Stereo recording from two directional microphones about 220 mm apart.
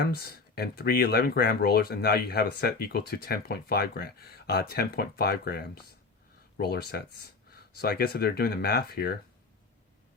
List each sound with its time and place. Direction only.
0.0 s speech: 45° left (ahead or behind)